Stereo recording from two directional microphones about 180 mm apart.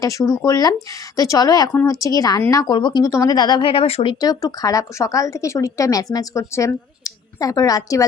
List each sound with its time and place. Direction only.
0.0 s speech: 20° left (ahead or behind)